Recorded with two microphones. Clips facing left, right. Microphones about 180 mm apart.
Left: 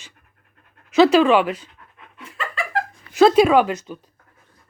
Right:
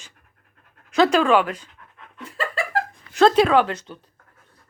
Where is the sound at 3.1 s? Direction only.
10° left (ahead or behind).